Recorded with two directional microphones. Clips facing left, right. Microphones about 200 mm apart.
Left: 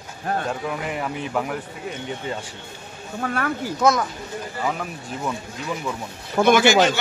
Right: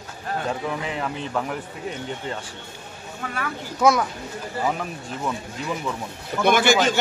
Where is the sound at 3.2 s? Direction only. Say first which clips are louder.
Left 5 dB; 50° left (ahead or behind).